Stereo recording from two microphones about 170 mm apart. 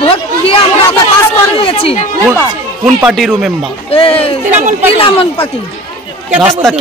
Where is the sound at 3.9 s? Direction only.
35° left (ahead or behind).